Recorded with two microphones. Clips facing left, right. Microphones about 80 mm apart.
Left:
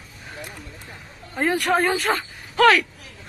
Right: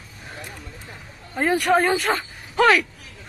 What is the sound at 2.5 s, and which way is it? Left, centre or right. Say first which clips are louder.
Speech: left 1 dB; centre.